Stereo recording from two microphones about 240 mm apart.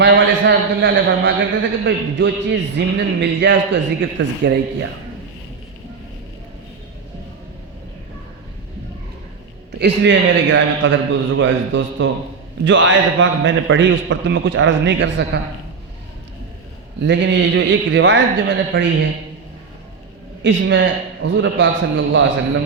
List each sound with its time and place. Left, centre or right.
0.0 s a man's voice: right
9.7 s a man's voice: right
17.0 s a man's voice: right
20.4 s a man's voice: right